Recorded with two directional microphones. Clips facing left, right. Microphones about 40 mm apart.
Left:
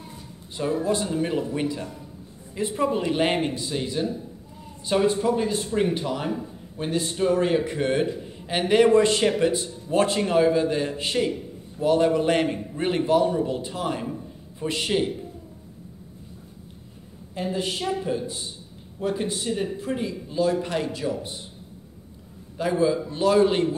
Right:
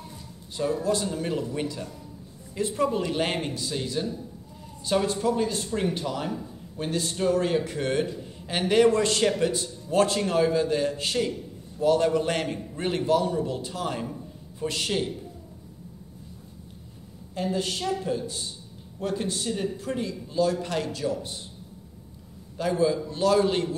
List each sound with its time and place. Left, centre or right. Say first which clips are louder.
0.6 s a man's voice: left 1 dB; left
17.3 s a man's voice: left 1 dB; centre
22.6 s a man's voice: left 2 dB; centre